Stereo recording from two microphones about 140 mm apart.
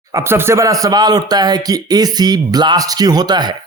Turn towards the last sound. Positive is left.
turn(degrees=-30)  # may be behind; listen again after turning